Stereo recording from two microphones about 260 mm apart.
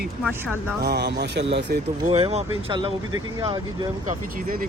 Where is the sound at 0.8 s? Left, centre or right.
Right.